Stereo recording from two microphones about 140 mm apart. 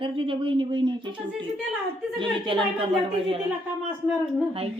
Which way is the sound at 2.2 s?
35° right (ahead or behind).